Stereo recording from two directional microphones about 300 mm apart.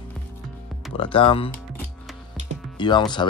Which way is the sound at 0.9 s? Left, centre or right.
Centre.